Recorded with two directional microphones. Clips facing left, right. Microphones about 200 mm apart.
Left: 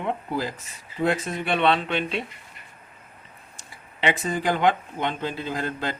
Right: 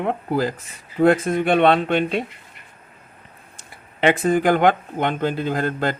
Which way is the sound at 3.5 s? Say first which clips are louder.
Right 7 dB; 55° right (ahead or behind).